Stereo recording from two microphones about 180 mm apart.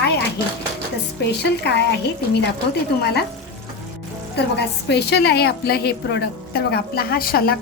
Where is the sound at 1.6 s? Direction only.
75° left (ahead or behind).